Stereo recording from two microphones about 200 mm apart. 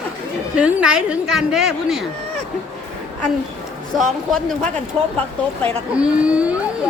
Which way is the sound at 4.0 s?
Centre (ahead or behind).